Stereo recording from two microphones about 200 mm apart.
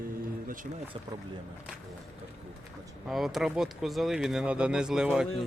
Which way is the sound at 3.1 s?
Centre (ahead or behind).